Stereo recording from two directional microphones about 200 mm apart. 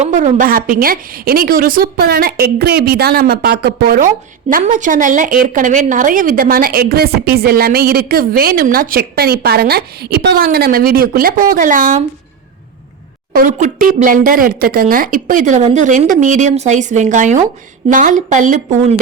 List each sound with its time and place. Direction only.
0.0 s a woman's voice: 35° right (ahead or behind)
13.3 s speech: 40° right (ahead or behind)